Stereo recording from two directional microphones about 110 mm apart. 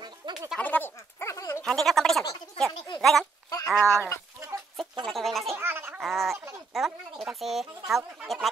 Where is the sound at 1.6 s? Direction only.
5° left (ahead or behind).